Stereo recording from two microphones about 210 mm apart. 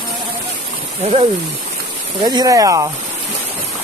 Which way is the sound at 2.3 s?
15° right (ahead or behind).